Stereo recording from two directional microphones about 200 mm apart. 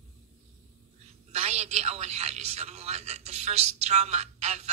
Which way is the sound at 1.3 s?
35° right (ahead or behind).